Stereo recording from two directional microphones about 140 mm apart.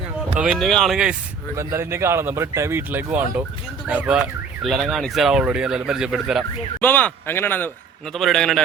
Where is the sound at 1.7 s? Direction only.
20° right (ahead or behind); by 6.4 s centre (ahead or behind).